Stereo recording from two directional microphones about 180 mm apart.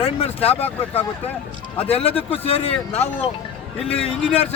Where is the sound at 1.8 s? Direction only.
30° left (ahead or behind).